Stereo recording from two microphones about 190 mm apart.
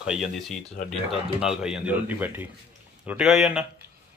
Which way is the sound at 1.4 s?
5° right (ahead or behind).